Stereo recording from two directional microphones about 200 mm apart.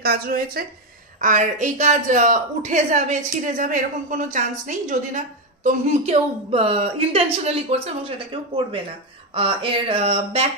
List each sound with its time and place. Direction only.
0.0 s a woman's voice: 50° right (ahead or behind); by 10.5 s 30° right (ahead or behind)